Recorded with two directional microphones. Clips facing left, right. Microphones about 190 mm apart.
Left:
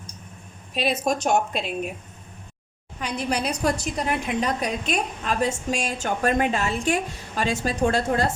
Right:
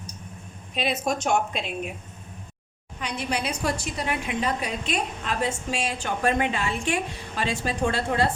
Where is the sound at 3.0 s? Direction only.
40° left (ahead or behind).